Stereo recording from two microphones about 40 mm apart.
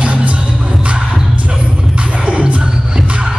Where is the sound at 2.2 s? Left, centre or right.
Right.